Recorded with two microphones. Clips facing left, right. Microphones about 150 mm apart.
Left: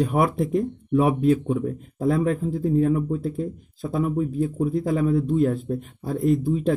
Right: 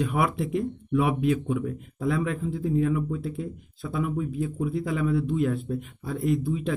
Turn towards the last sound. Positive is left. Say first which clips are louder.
# left 5 dB
turn(degrees=40)  # may be behind; listen again after turning